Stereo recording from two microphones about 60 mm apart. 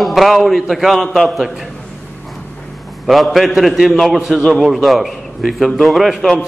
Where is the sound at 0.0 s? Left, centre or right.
Centre.